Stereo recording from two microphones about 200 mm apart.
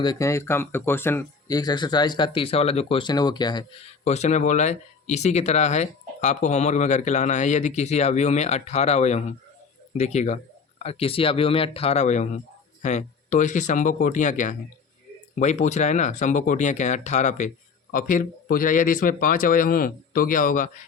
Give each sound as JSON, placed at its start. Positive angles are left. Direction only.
{"t": 0.0, "sound": "speech", "side_deg": 15}
{"t": 4.0, "sound": "a man's voice", "side_deg": 35}